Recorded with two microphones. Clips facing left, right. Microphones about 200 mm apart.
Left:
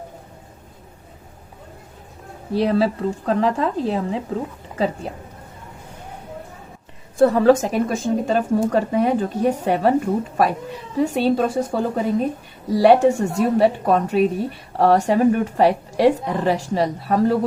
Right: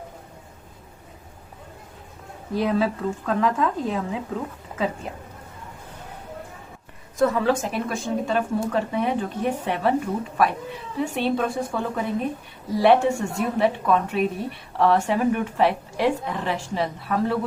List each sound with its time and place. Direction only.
2.5 s speech: 35° left (ahead or behind)
7.2 s speech: 35° left (ahead or behind)
10.9 s speech: 40° left (ahead or behind)